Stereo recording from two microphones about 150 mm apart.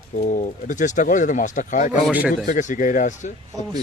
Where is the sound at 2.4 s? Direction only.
55° left (ahead or behind).